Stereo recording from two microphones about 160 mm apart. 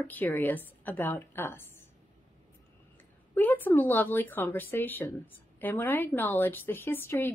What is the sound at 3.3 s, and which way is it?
A woman's voice, 10° left (ahead or behind).